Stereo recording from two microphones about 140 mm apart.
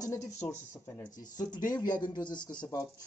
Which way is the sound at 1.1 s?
70° left (ahead or behind).